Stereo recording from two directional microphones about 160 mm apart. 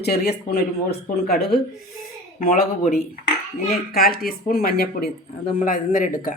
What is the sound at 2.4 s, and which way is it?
Speech, 65° left (ahead or behind).